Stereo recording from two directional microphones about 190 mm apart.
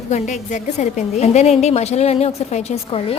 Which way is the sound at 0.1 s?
40° left (ahead or behind).